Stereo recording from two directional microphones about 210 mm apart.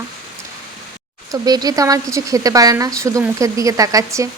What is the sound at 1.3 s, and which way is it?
Speech, 20° right (ahead or behind).